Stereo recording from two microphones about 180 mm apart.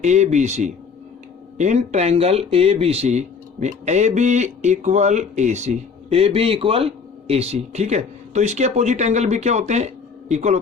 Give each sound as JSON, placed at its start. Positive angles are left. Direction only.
{"t": 0.0, "sound": "speech", "side_deg": -40}